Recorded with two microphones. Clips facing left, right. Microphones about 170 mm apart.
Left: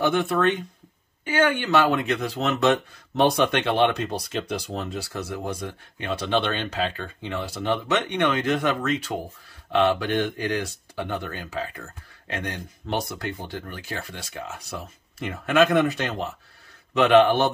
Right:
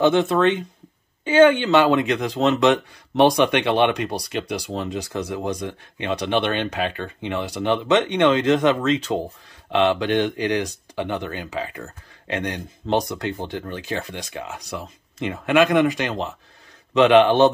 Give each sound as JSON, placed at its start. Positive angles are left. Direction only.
{"t": 0.0, "sound": "speech", "side_deg": -20}
{"t": 6.7, "sound": "speech", "side_deg": -60}
{"t": 7.2, "sound": "speech", "side_deg": -20}